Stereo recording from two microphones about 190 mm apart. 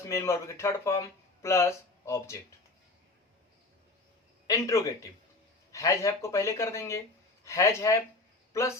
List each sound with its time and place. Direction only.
0.0 s speech: 15° left (ahead or behind)
4.4 s speech: 15° left (ahead or behind)